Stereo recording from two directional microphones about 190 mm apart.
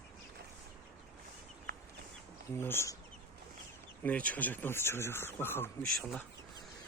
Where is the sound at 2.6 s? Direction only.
10° left (ahead or behind).